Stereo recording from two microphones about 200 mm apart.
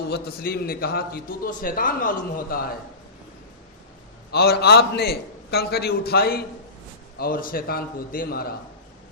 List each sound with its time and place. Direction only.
0.1 s a man's voice: 50° left (ahead or behind)
4.3 s a man's voice: 50° left (ahead or behind)